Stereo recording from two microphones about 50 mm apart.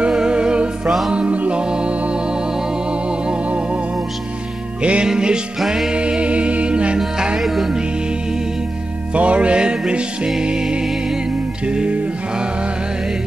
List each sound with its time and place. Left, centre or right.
0.0 s music: centre
3.3 s music: right
4.8 s music: centre
7.3 s music: centre
9.1 s music: right